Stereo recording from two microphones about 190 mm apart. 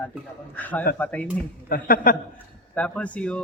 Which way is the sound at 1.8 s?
50° left (ahead or behind).